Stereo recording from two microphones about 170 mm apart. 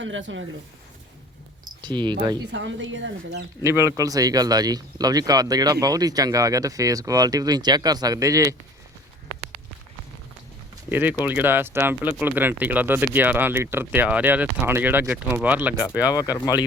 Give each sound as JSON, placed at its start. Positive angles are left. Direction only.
{"t": 0.0, "sound": "speech", "side_deg": -90}
{"t": 1.6, "sound": "speech", "side_deg": -25}
{"t": 2.5, "sound": "speech", "side_deg": -90}
{"t": 3.6, "sound": "speech", "side_deg": -15}
{"t": 10.8, "sound": "speech", "side_deg": -10}
{"t": 16.1, "sound": "speech", "side_deg": 20}